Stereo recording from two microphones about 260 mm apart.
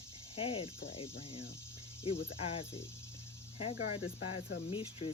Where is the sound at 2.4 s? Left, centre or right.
Left.